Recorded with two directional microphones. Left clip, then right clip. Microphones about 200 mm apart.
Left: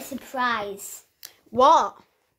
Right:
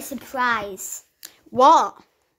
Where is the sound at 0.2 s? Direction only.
35° right (ahead or behind).